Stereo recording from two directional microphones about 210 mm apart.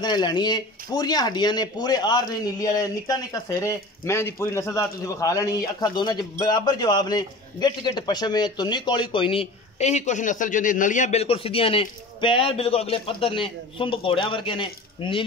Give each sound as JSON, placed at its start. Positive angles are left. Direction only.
{"t": 0.0, "sound": "a man's voice", "side_deg": 20}